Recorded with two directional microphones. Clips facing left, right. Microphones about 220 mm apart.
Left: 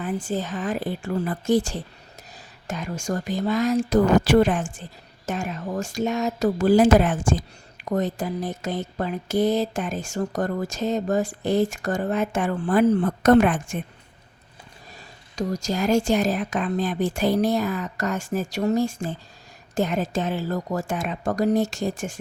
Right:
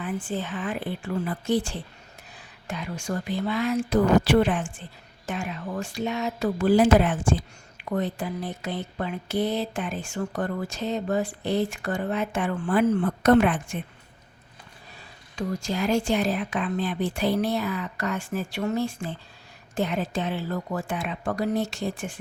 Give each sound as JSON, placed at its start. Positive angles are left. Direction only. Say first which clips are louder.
{"t": 0.0, "sound": "speech", "louder": "left 3 dB", "side_deg": 40}
{"t": 14.9, "sound": "speech", "louder": "left 4 dB", "side_deg": 40}